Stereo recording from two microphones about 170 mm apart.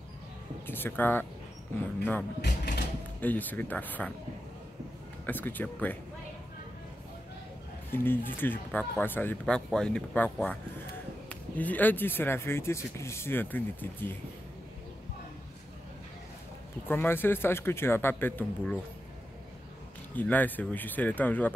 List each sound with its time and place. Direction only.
0.7 s speech: 10° left (ahead or behind)
2.4 s mechanisms: 75° left (ahead or behind)
3.2 s speech: 10° left (ahead or behind)
5.2 s speech: 10° left (ahead or behind)
7.9 s speech: 10° left (ahead or behind)
16.8 s speech: 10° left (ahead or behind)
20.2 s speech: 10° left (ahead or behind)